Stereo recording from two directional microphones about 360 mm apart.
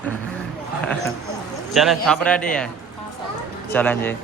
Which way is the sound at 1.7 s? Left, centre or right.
Centre.